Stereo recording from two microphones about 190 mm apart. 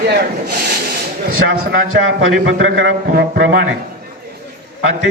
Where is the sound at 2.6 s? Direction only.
60° right (ahead or behind).